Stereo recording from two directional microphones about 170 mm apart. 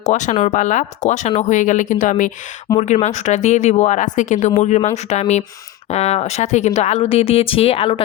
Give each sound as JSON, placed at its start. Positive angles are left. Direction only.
{"t": 0.0, "sound": "speech", "side_deg": 45}